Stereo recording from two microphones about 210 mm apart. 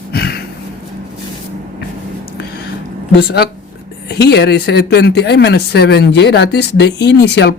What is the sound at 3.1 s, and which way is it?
A woman's voice, 50° left (ahead or behind).